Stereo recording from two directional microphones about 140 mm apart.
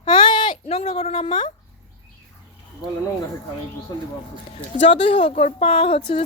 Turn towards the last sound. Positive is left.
turn(degrees=45)  # may be behind; listen again after turning